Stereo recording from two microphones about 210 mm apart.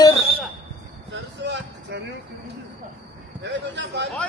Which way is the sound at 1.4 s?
55° right (ahead or behind).